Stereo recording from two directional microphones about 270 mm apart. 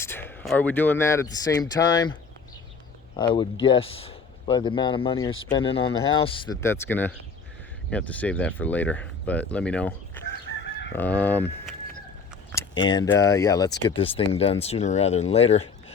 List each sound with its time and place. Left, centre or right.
0.0 s speech: centre
3.2 s speech: centre
10.2 s chicken: centre
10.7 s chicken: left
10.9 s speech: centre; by 15.6 s left